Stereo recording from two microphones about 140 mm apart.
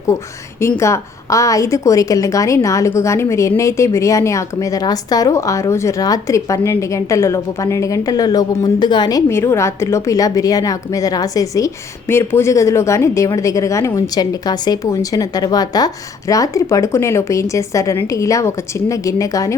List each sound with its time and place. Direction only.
0.6 s a woman's voice: 20° left (ahead or behind)